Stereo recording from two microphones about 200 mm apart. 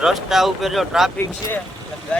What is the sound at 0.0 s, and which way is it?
Speech, centre (ahead or behind).